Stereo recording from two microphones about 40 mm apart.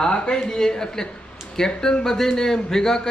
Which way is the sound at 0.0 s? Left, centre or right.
Centre.